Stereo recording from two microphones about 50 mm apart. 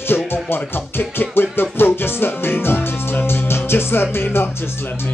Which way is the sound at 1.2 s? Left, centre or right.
Left.